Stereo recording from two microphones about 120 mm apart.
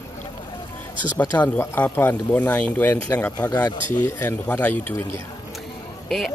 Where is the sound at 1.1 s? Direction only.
10° left (ahead or behind).